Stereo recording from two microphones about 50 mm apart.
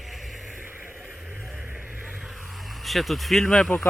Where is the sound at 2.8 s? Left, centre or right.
Centre.